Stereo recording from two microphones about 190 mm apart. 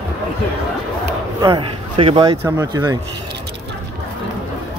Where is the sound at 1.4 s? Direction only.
25° right (ahead or behind).